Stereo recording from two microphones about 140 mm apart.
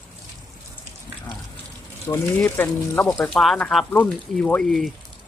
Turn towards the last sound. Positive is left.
turn(degrees=0)  # may be behind; listen again after turning